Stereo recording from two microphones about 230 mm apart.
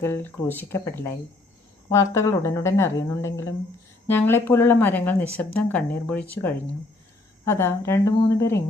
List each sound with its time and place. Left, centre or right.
0.0 s speech: centre